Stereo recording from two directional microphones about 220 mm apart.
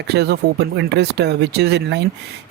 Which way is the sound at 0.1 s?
50° right (ahead or behind).